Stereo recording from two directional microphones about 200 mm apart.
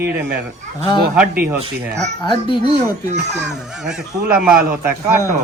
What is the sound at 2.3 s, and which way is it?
Speech, 25° left (ahead or behind).